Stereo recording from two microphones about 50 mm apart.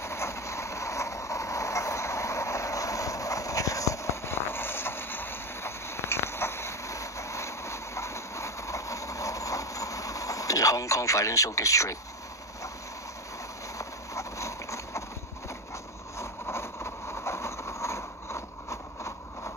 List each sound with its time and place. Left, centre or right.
0.0 s vehicle: left
13.7 s clip-clop: left
16.2 s vehicle: left